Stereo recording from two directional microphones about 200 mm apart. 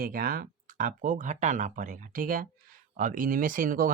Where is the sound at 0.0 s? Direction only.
45° right (ahead or behind).